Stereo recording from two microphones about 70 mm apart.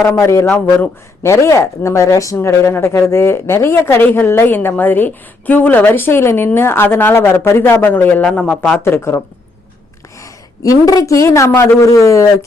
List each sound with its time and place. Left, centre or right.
0.0 s a man's voice: left
8.2 s speech: centre
8.8 s speech: left
10.2 s a woman's voice: left
11.4 s speech: left
11.8 s a man's voice: left